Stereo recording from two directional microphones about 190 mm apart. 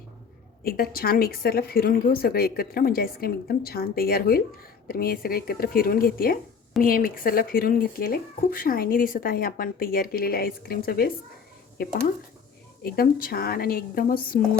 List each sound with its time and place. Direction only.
0.6 s speech: 50° left (ahead or behind)
12.8 s speech: 50° left (ahead or behind)